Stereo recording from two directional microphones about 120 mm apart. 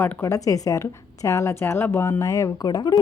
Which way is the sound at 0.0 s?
20° left (ahead or behind).